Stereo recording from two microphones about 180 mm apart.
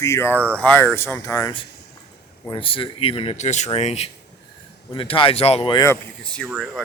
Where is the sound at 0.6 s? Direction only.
10° left (ahead or behind).